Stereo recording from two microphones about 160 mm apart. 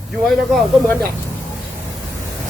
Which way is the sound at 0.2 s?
Centre (ahead or behind).